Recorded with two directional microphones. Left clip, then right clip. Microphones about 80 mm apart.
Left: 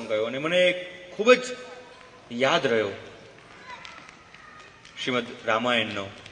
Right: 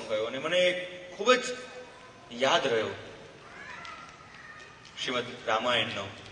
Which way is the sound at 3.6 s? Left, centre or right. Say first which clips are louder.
Left 2 dB; left.